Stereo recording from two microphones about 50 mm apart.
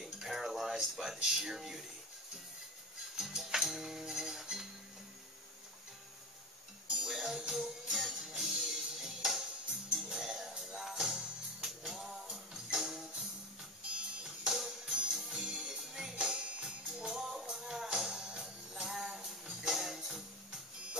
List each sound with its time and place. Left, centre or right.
0.0 s a sound: centre
3.2 s music: centre
7.0 s music: centre